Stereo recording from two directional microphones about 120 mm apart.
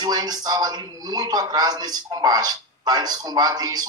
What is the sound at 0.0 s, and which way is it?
A man's voice, 35° right (ahead or behind).